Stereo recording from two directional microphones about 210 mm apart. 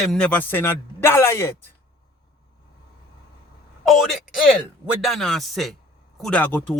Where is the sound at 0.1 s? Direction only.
5° left (ahead or behind).